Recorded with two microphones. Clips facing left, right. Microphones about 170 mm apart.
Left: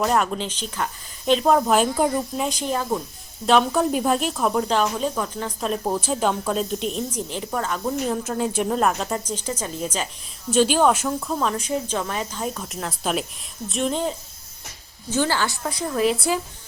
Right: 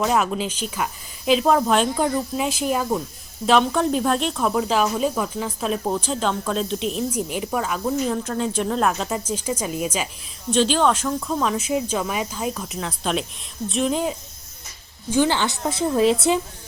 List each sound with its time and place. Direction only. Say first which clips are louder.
0.0 s speech: right 1 dB; centre (ahead or behind)
10.5 s a woman's voice: left 1 dB; 10° left (ahead or behind); by 16.4 s 25° right (ahead or behind)